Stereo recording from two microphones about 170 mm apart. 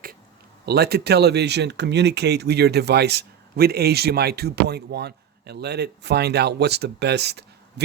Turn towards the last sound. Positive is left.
turn(degrees=-80)